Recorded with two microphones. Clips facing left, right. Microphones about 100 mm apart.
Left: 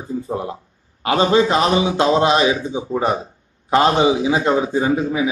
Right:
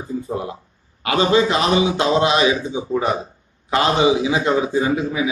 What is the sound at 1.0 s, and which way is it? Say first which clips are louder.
A man's voice: left 1 dB; 40° left (ahead or behind).